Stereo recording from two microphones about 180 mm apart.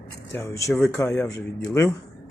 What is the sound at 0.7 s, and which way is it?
Speech, centre (ahead or behind).